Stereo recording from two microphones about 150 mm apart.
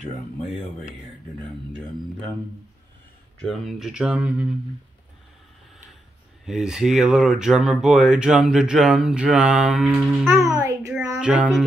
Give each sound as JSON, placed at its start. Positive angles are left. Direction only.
{"t": 0.4, "sound": "a sound", "side_deg": 0}
{"t": 3.3, "sound": "speech", "side_deg": 0}
{"t": 6.4, "sound": "speech", "side_deg": -5}
{"t": 10.3, "sound": "a child's voice", "side_deg": -15}
{"t": 11.1, "sound": "a child's voice", "side_deg": -10}